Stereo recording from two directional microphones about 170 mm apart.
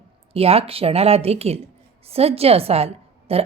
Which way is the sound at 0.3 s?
35° right (ahead or behind).